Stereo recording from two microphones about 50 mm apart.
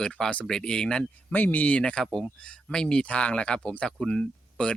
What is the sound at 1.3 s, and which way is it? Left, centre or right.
Speech, left.